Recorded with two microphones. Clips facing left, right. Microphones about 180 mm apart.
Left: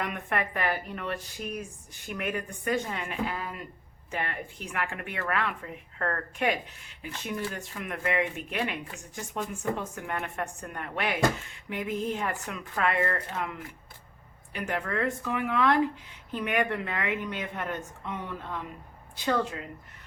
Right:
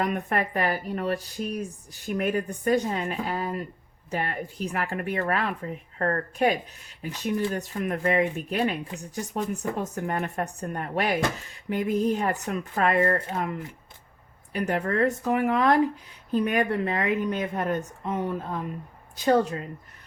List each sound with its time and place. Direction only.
0.0 s speech: 40° right (ahead or behind)